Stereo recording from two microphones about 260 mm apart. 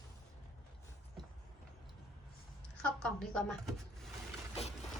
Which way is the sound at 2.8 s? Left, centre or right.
Centre.